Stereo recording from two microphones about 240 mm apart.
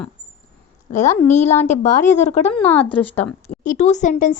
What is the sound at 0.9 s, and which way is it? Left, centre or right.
A woman's voice, left.